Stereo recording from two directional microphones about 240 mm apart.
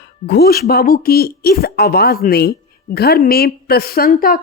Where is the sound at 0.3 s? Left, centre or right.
Left.